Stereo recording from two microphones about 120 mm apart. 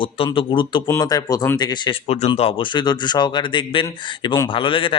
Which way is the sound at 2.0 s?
55° left (ahead or behind).